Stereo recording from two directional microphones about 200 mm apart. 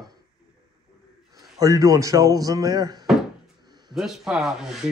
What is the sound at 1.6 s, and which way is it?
Speech, 15° right (ahead or behind).